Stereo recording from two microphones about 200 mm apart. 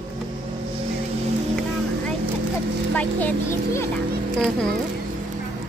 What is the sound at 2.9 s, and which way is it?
A child's voice, 10° left (ahead or behind).